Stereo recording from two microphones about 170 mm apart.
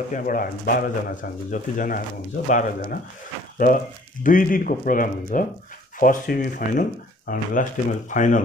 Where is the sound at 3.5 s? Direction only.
50° left (ahead or behind).